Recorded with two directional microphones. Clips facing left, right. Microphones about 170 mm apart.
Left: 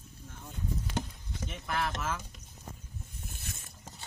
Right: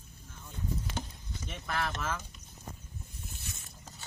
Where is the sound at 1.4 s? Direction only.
5° left (ahead or behind).